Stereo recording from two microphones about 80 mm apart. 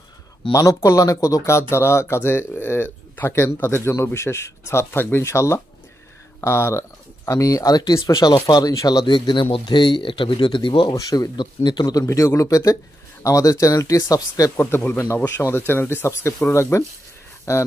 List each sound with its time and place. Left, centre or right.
0.5 s speech: left
11.0 s speech: left
11.3 s speech: left
14.8 s speech: left